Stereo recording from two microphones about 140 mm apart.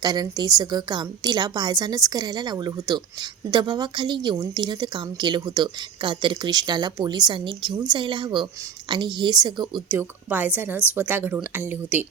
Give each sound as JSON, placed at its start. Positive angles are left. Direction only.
{"t": 0.0, "sound": "a woman's voice", "side_deg": -30}
{"t": 9.9, "sound": "a woman's voice", "side_deg": -15}